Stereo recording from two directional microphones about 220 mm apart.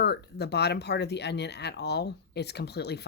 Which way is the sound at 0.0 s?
50° left (ahead or behind).